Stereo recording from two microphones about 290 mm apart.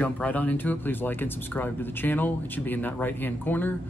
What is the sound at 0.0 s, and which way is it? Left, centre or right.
Speech, centre.